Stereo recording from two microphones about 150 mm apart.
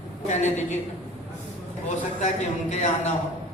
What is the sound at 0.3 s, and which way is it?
Speech, 50° left (ahead or behind).